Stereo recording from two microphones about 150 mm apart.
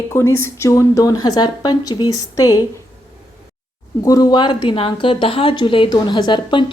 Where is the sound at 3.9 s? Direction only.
25° left (ahead or behind).